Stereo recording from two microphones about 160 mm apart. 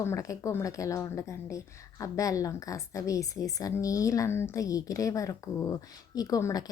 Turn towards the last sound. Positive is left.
turn(degrees=20)  # may be behind; listen again after turning